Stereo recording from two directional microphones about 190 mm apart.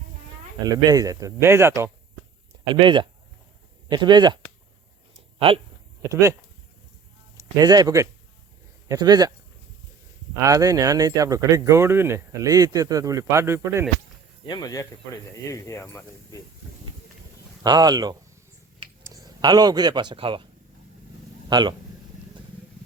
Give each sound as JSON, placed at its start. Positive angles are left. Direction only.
{"t": 0.6, "sound": "speech", "side_deg": -20}
{"t": 2.8, "sound": "speech", "side_deg": -25}
{"t": 6.0, "sound": "speech", "side_deg": -15}
{"t": 7.3, "sound": "speech", "side_deg": -20}
{"t": 10.4, "sound": "speech", "side_deg": -15}
{"t": 14.4, "sound": "speech", "side_deg": 20}
{"t": 17.6, "sound": "speech", "side_deg": -20}
{"t": 21.5, "sound": "speech", "side_deg": -25}